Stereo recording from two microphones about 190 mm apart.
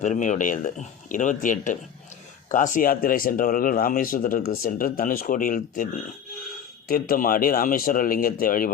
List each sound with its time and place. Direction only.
0.0 s speech: 40° left (ahead or behind)